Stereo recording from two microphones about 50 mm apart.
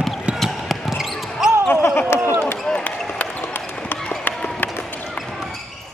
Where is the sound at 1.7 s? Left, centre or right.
Left.